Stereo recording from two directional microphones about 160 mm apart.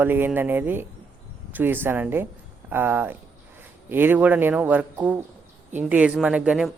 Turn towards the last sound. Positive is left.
turn(degrees=-5)  # may be behind; listen again after turning